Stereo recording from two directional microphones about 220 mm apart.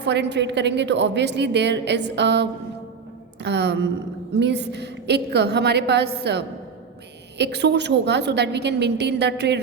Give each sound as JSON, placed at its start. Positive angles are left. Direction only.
{"t": 0.0, "sound": "a woman's voice", "side_deg": -50}